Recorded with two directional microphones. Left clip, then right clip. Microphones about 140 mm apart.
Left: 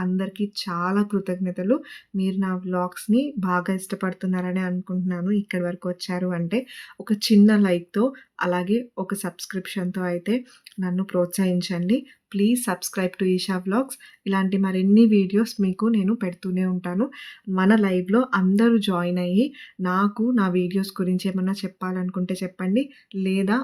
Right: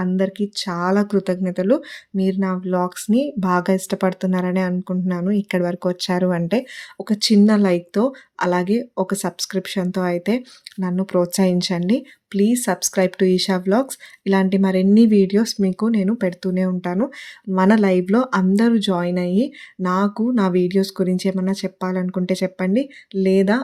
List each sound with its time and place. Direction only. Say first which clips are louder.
0.0 s speech: right 7 dB; 30° right (ahead or behind)